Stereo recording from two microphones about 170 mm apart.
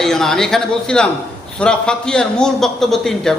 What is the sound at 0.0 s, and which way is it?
A man's voice, centre (ahead or behind).